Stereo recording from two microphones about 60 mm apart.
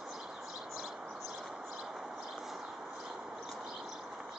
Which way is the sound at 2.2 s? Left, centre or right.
Centre.